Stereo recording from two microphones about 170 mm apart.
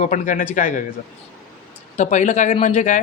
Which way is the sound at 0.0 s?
45° left (ahead or behind).